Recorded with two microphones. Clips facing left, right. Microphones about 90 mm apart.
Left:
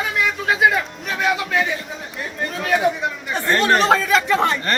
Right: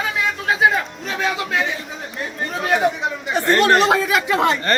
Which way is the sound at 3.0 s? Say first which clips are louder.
Right 2 dB; 20° right (ahead or behind).